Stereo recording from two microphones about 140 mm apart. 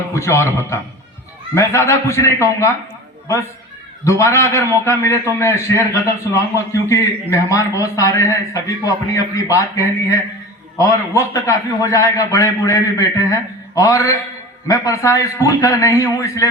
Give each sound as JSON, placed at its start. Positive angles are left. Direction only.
{"t": 0.1, "sound": "a man's voice", "side_deg": 20}
{"t": 4.0, "sound": "a man's voice", "side_deg": 20}